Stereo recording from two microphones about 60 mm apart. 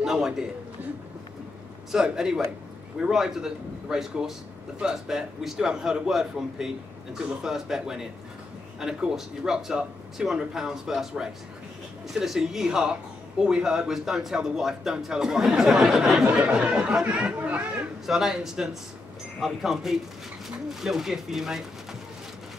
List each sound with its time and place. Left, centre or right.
0.0 s a man's voice: centre
1.9 s speech: centre
16.3 s speech: right
18.0 s speech: centre